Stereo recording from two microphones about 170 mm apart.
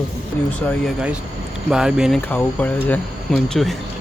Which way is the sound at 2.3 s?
10° left (ahead or behind).